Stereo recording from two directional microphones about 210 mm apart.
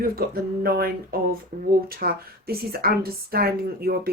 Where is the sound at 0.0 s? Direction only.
45° right (ahead or behind).